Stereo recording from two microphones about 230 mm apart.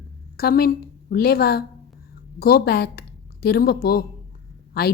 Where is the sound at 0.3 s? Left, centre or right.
Left.